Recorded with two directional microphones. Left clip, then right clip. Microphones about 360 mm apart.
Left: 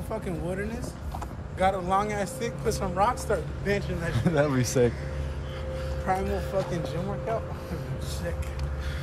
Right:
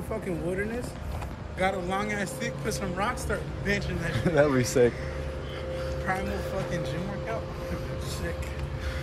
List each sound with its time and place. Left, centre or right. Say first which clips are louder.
1.6 s speech: left 4 dB; centre
4.2 s speech: right 3 dB; centre
6.1 s speech: left 4 dB; centre